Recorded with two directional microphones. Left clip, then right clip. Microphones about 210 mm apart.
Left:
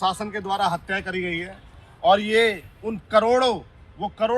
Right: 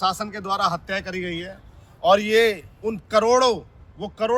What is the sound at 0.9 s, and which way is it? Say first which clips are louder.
Speech: left 1 dB; 25° right (ahead or behind).